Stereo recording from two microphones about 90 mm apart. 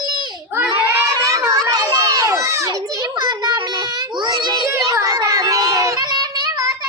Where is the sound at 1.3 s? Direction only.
35° right (ahead or behind).